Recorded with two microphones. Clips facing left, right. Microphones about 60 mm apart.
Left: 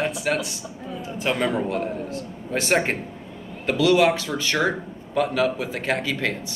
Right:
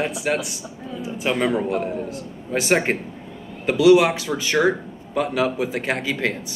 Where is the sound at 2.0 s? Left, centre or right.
Centre.